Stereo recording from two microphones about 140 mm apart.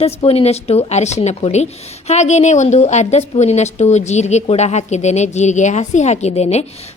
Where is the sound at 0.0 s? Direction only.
45° left (ahead or behind).